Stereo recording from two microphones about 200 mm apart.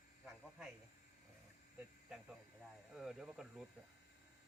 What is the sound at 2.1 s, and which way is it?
Speech, centre (ahead or behind).